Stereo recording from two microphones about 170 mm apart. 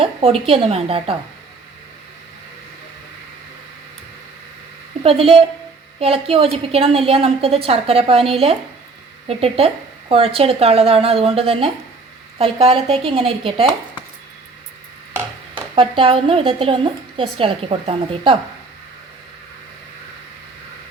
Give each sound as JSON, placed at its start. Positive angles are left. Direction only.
{"t": 0.0, "sound": "a woman's voice", "side_deg": -35}
{"t": 5.0, "sound": "speech", "side_deg": -35}
{"t": 15.5, "sound": "speech", "side_deg": -30}